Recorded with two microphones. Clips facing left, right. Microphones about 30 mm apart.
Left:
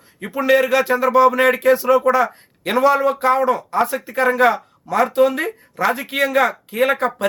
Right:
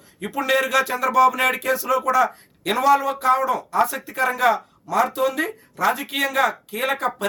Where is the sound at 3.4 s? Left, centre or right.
Left.